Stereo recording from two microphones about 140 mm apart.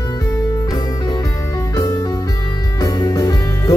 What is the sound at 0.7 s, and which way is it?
Music, 30° left (ahead or behind).